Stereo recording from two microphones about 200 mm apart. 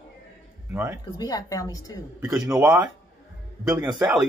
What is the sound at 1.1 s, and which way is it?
Speech, 20° left (ahead or behind).